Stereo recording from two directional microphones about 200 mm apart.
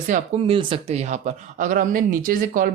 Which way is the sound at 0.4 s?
25° right (ahead or behind).